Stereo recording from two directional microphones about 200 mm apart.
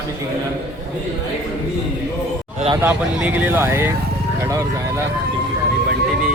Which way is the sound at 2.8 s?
10° right (ahead or behind).